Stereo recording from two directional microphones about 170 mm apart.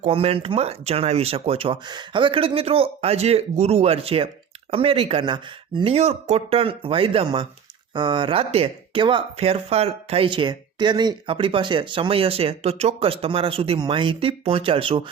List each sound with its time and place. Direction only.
0.1 s speech: 35° right (ahead or behind)